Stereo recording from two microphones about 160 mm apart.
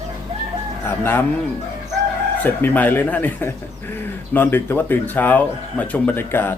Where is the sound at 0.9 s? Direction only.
15° left (ahead or behind).